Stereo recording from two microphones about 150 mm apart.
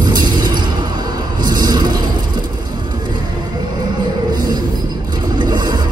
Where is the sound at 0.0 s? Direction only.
30° right (ahead or behind).